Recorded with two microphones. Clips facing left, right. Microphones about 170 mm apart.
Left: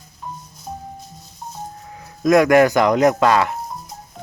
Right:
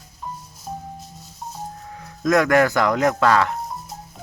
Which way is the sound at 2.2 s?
15° left (ahead or behind).